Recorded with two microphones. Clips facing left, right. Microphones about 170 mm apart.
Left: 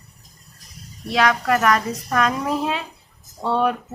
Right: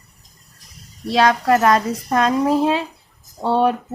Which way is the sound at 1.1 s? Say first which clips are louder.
Right 4 dB; 30° right (ahead or behind).